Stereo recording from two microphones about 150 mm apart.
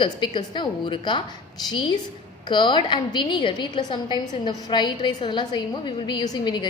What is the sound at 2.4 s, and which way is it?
A woman's voice, 30° left (ahead or behind).